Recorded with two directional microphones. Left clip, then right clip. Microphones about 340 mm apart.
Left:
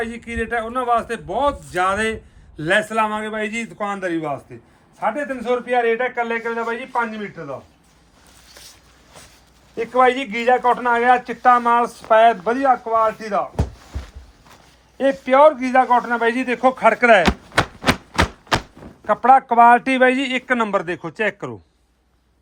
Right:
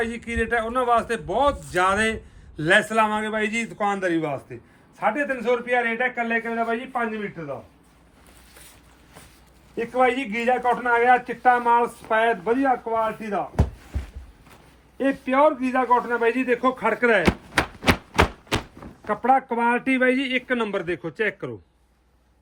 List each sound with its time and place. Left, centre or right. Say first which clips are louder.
0.0 s a man's voice: even; centre
9.7 s speech: left 5 dB; centre
14.9 s a man's voice: left 6 dB; left
17.5 s a sound: left 3 dB; centre
19.0 s speech: left 7 dB; centre